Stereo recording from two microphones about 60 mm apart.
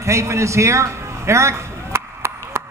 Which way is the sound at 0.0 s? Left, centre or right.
Right.